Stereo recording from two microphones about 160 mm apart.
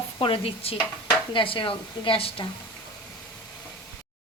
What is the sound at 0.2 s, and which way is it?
Speech, 35° left (ahead or behind).